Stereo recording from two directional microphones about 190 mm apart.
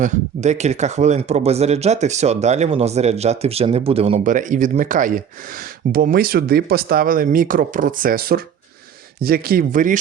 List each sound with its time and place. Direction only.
0.0 s speech: 40° right (ahead or behind)